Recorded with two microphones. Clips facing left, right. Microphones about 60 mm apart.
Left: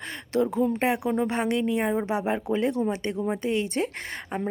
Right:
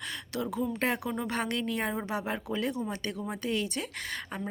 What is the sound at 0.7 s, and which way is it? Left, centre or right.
A woman's voice, left.